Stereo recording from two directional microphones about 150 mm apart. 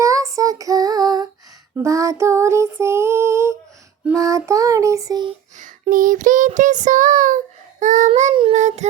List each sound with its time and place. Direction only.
0.0 s female singing: 20° right (ahead or behind)
1.7 s child singing: 20° right (ahead or behind)
5.5 s a sound: 60° right (ahead or behind)
8.5 s child singing: 50° right (ahead or behind)